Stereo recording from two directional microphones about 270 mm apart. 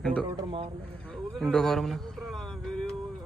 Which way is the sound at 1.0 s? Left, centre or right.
Centre.